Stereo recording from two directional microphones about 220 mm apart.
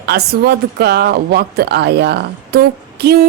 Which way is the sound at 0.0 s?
45° right (ahead or behind).